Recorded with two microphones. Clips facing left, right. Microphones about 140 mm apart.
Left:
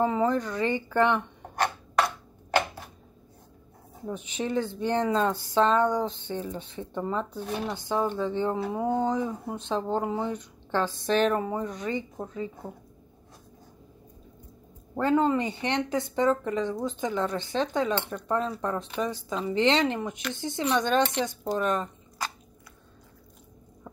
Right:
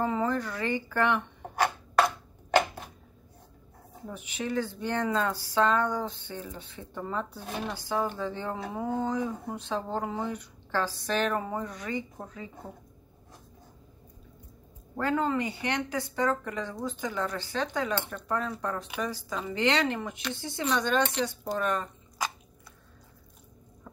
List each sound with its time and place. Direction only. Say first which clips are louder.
0.0 s speech: left 4 dB; 20° left (ahead or behind)
1.5 s a sound: even; 10° right (ahead or behind)
4.1 s speech: left 3 dB; 20° left (ahead or behind)
15.0 s speech: left 4 dB; 20° left (ahead or behind)